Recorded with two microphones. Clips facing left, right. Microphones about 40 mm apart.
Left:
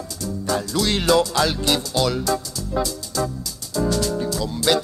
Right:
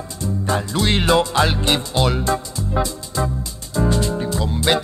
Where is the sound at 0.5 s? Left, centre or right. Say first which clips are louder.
Right 1 dB; right.